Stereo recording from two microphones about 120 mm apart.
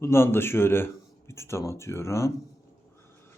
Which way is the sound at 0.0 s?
20° left (ahead or behind).